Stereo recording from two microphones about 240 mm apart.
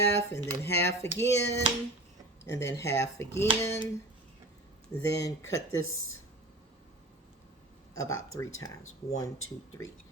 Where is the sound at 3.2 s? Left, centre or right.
Centre.